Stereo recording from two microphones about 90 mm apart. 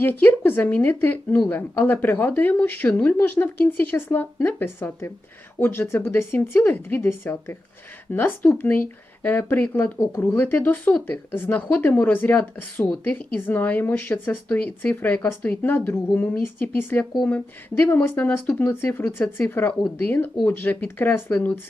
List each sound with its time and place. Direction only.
0.0 s speech: 20° left (ahead or behind)